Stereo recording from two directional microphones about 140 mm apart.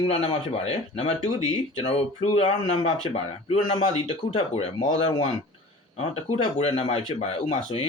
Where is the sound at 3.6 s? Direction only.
40° left (ahead or behind).